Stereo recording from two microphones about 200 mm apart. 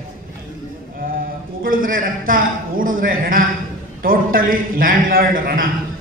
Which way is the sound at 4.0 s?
45° right (ahead or behind).